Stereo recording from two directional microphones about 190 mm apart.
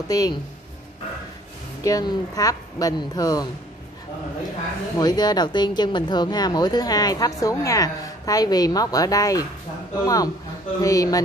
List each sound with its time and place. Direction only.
0.1 s speech: 20° left (ahead or behind)
1.8 s speech: 20° left (ahead or behind)
4.9 s speech: 20° left (ahead or behind)